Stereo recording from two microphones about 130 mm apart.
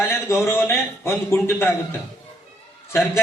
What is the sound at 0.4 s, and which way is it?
A man's voice, 20° left (ahead or behind).